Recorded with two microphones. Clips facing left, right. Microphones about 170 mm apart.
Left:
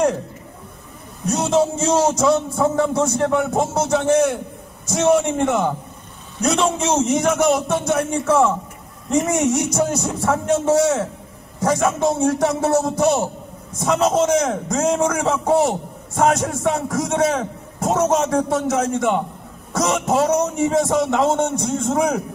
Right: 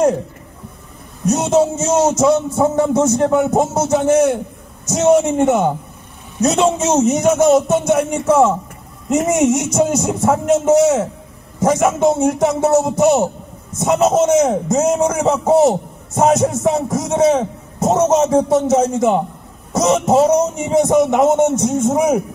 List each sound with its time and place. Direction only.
1.2 s a man's voice: 20° right (ahead or behind)